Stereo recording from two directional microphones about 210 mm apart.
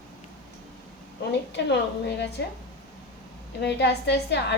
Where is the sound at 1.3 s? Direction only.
55° left (ahead or behind).